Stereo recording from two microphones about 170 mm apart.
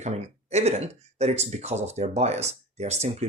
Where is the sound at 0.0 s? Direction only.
40° right (ahead or behind).